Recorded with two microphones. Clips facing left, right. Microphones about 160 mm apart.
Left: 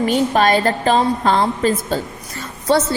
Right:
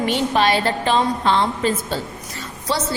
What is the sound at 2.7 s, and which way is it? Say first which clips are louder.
Speech: left 8 dB; 55° left (ahead or behind).